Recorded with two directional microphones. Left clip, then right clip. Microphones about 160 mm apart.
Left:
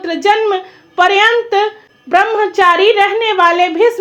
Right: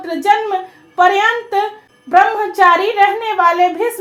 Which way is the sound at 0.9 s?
15° left (ahead or behind).